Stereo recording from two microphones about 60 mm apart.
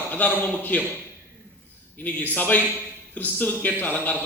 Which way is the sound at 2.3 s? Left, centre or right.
Left.